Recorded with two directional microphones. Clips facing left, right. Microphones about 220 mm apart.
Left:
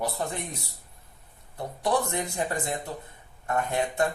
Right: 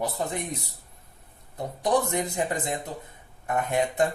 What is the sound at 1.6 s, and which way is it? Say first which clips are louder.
Speech: right 2 dB; 20° right (ahead or behind).